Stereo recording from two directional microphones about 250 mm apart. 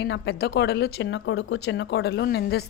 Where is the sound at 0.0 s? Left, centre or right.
Left.